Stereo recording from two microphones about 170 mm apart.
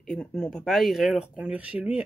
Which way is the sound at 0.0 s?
5° left (ahead or behind).